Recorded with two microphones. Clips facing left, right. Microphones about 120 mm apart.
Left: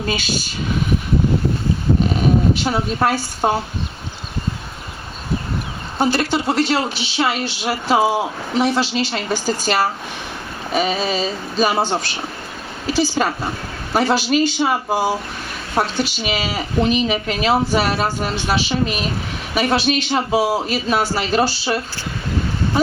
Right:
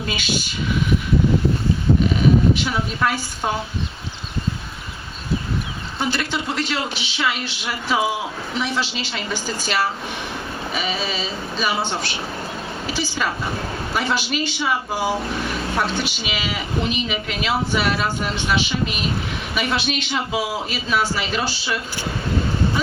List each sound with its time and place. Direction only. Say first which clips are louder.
2.6 s speech: left 4 dB; 40° left (ahead or behind)
6.0 s speech: left 6 dB; 40° left (ahead or behind)